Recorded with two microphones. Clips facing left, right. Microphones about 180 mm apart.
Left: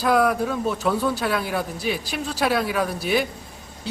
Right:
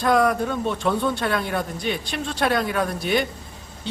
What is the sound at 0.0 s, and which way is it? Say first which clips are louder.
A man's voice: even; 5° left (ahead or behind).